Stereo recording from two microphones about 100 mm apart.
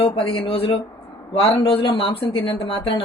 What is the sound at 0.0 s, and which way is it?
Speech, 65° left (ahead or behind).